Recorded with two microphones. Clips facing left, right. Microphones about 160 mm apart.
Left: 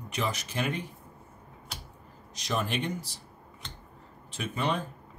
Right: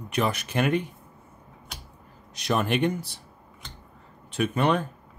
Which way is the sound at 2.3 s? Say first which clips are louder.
Right 6 dB; 60° right (ahead or behind).